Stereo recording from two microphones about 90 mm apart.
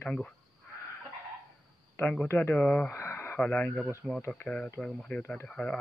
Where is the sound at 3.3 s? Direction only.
15° left (ahead or behind).